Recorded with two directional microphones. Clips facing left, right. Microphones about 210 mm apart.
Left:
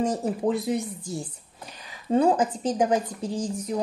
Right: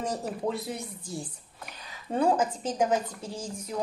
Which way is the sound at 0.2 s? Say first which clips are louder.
Left 6 dB; 20° left (ahead or behind).